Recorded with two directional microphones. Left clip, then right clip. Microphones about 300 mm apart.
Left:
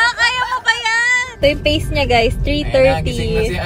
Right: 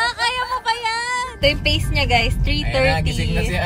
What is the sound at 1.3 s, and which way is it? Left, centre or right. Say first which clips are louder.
Speech: left 4 dB; centre.